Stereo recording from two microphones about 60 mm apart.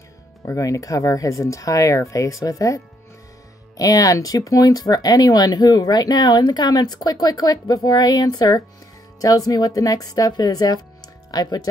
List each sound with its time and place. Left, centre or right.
0.5 s speech: left
3.7 s speech: left